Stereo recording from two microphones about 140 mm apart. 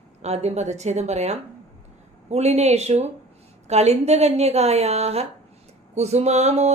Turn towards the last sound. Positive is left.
turn(degrees=-50)  # may be behind; listen again after turning